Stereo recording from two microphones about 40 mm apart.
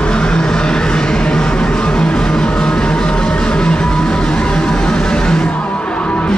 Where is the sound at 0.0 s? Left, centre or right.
Left.